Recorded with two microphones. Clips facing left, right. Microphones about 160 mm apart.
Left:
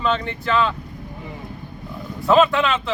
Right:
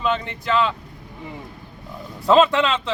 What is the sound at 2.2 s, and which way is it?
Speech, 30° right (ahead or behind).